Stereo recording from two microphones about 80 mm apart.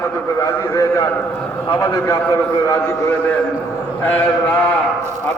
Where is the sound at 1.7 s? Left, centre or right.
Left.